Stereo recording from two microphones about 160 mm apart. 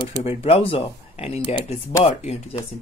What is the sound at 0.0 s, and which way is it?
Speech, 35° left (ahead or behind).